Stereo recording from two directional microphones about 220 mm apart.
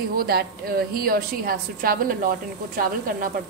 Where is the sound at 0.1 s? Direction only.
45° right (ahead or behind).